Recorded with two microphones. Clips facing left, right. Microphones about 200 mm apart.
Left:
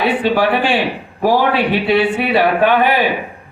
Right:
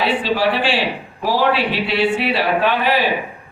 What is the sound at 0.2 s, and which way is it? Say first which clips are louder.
A man's voice: left 4 dB; 55° left (ahead or behind).